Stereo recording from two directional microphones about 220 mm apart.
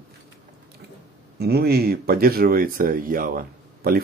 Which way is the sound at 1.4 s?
45° right (ahead or behind).